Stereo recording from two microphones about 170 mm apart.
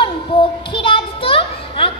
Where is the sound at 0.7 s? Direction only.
30° left (ahead or behind).